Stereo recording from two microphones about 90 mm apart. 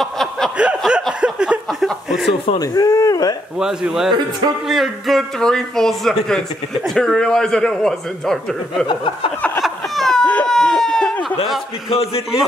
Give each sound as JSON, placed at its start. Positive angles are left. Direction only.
{"t": 0.0, "sound": "snicker", "side_deg": 5}
{"t": 0.6, "sound": "chuckle", "side_deg": -10}
{"t": 1.2, "sound": "a sound", "side_deg": -10}
{"t": 1.7, "sound": "chuckle", "side_deg": 0}
{"t": 2.6, "sound": "speech", "side_deg": 40}
{"t": 3.5, "sound": "speech", "side_deg": -5}
{"t": 8.8, "sound": "speech", "side_deg": 65}
{"t": 9.6, "sound": "a sound", "side_deg": 5}
{"t": 10.2, "sound": "baby cry", "side_deg": 15}
{"t": 10.5, "sound": "a sound", "side_deg": 5}
{"t": 11.4, "sound": "chuckle", "side_deg": 0}